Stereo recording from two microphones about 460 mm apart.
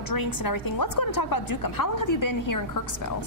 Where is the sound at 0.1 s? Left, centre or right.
Left.